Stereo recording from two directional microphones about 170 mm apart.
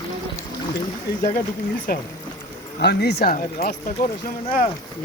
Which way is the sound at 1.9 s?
60° left (ahead or behind).